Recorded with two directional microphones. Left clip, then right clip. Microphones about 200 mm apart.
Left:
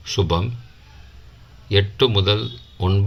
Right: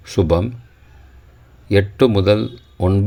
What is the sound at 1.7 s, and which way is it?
Speech, 40° right (ahead or behind).